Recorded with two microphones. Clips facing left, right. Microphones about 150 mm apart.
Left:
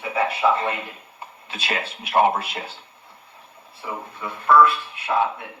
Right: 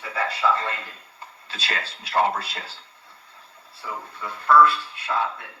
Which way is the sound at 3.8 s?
25° left (ahead or behind).